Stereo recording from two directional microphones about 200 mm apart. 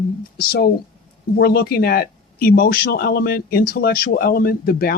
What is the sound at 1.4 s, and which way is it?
Speech, 50° left (ahead or behind).